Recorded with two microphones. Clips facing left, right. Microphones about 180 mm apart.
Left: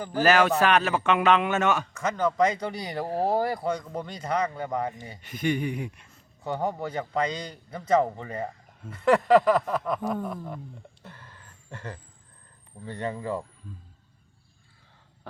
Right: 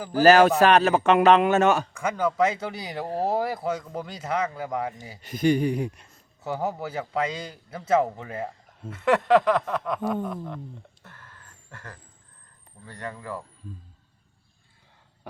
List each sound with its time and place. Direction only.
0.2 s a man's voice: 40° right (ahead or behind)
1.9 s a man's voice: 10° right (ahead or behind)
5.2 s a man's voice: 35° right (ahead or behind)
6.4 s a man's voice: 5° right (ahead or behind)
11.0 s a sound: 15° left (ahead or behind)
12.8 s speech: 25° left (ahead or behind)